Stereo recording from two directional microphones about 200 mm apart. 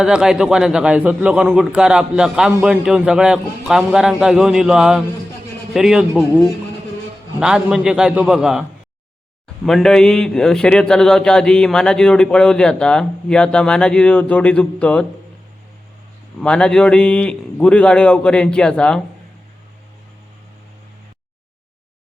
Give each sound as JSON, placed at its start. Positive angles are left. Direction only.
{"t": 0.0, "sound": "speech", "side_deg": -5}
{"t": 9.6, "sound": "speech", "side_deg": 0}
{"t": 16.4, "sound": "speech", "side_deg": 5}